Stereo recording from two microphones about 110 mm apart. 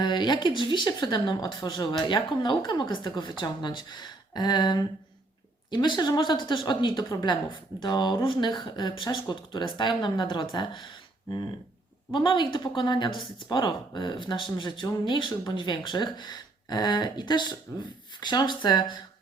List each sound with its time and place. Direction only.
0.0 s a woman's voice: 45° left (ahead or behind)